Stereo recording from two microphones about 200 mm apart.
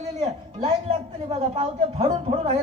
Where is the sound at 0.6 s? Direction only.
30° right (ahead or behind).